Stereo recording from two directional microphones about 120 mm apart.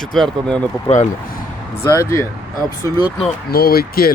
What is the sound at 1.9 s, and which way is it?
Speech, 25° left (ahead or behind).